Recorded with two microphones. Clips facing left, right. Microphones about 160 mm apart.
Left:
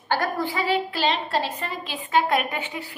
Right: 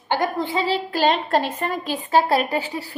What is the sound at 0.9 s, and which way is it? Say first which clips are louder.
A woman's voice: right 5 dB; 45° right (ahead or behind).